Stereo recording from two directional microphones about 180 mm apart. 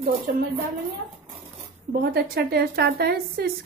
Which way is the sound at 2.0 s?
60° right (ahead or behind).